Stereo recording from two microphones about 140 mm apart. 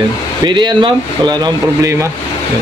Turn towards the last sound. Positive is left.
turn(degrees=-25)  # may be behind; listen again after turning